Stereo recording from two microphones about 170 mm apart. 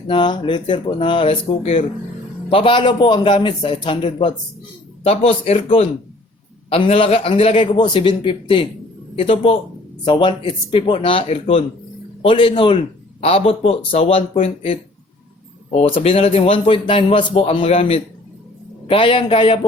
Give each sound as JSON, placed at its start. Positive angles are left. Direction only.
{"t": 0.1, "sound": "a man's voice", "side_deg": 30}
{"t": 16.0, "sound": "a man's voice", "side_deg": 35}